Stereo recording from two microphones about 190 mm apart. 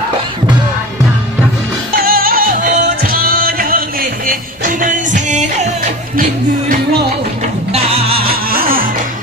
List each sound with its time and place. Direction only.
2.0 s music: 50° right (ahead or behind)
7.7 s music: 30° right (ahead or behind)
8.1 s music: 50° right (ahead or behind)